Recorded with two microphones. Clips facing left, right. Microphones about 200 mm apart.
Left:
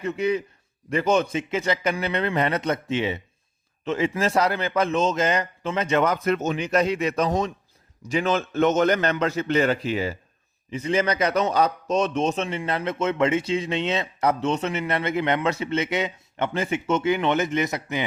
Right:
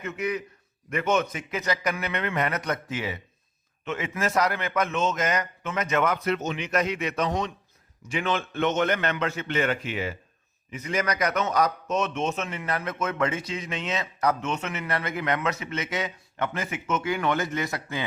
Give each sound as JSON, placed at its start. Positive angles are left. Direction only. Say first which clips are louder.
{"t": 0.0, "sound": "a man's voice", "louder": "left 6 dB", "side_deg": 30}
{"t": 6.2, "sound": "a man's voice", "louder": "left 4 dB", "side_deg": 45}